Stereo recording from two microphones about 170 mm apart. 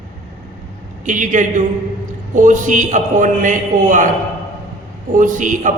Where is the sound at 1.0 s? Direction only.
50° right (ahead or behind).